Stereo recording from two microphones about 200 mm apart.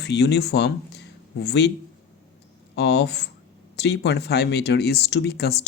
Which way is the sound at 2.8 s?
55° left (ahead or behind).